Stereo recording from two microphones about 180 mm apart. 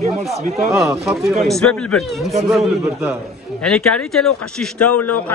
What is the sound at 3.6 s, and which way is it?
Speech, 5° left (ahead or behind).